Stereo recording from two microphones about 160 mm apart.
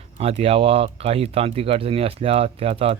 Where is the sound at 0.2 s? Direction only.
40° right (ahead or behind).